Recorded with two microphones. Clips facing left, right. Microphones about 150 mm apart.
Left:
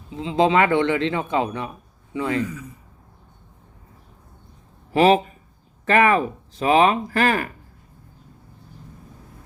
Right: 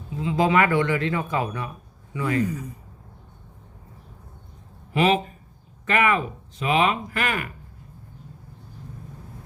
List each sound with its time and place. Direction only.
0.2 s speech: 25° left (ahead or behind)
4.9 s speech: 35° left (ahead or behind)